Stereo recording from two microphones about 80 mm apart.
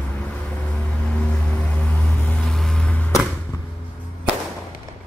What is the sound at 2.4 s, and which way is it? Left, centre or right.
Vehicle, centre.